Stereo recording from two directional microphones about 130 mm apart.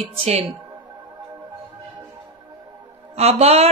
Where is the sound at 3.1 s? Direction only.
50° right (ahead or behind).